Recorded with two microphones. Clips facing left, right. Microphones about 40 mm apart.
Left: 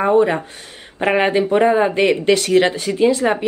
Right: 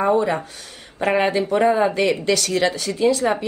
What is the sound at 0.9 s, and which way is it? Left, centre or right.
Speech, left.